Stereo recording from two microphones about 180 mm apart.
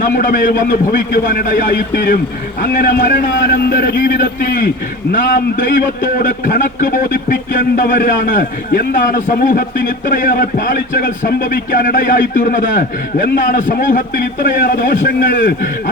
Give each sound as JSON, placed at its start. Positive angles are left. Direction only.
{"t": 0.2, "sound": "a man's voice", "side_deg": 50}
{"t": 4.2, "sound": "a man's voice", "side_deg": 55}